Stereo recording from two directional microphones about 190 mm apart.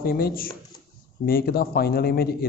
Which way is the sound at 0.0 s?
50° left (ahead or behind).